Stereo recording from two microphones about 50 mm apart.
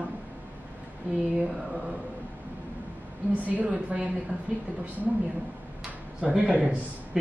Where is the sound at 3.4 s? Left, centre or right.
Right.